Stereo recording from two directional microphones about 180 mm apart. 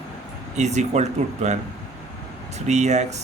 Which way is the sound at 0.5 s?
40° right (ahead or behind).